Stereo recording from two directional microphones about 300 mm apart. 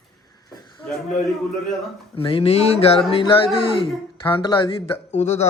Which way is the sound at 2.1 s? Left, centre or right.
Centre.